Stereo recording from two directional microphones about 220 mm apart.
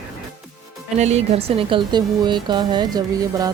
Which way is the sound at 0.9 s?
30° right (ahead or behind).